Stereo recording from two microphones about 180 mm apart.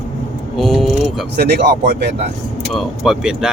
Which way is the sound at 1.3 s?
60° right (ahead or behind).